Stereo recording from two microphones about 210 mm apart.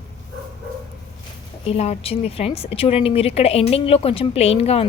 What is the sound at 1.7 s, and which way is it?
Speech, 30° left (ahead or behind).